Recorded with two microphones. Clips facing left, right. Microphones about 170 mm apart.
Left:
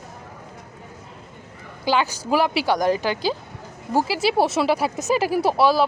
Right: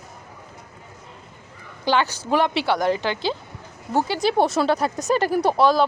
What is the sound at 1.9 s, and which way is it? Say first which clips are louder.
Speech: even; 10° left (ahead or behind).